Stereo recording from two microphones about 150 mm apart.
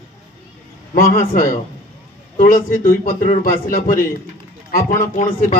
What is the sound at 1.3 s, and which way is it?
Speech, 70° left (ahead or behind).